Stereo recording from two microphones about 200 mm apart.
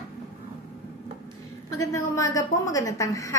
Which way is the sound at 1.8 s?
15° left (ahead or behind).